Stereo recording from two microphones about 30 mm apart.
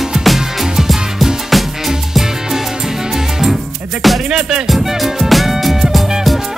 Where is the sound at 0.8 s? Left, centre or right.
Centre.